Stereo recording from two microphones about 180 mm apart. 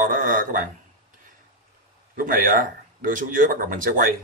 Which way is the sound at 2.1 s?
50° right (ahead or behind).